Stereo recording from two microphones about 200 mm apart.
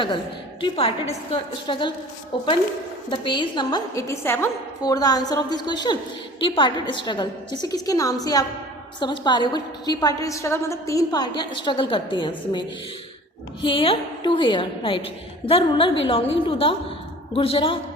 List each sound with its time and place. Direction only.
0.6 s a woman's voice: 30° left (ahead or behind)